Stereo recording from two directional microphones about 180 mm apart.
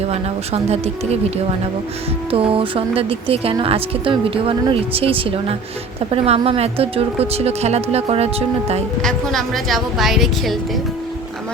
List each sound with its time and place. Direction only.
0.1 s speech: 35° right (ahead or behind)
2.3 s speech: 30° right (ahead or behind)
9.0 s speech: centre (ahead or behind)